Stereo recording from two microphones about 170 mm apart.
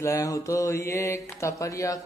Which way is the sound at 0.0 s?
20° left (ahead or behind).